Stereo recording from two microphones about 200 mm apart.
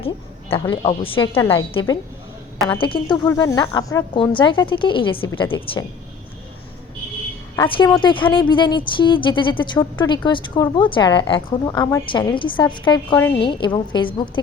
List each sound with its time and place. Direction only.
0.5 s speech: 25° left (ahead or behind)
7.5 s speech: 20° left (ahead or behind)